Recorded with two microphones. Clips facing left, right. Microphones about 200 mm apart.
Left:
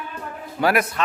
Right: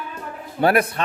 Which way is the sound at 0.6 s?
30° right (ahead or behind).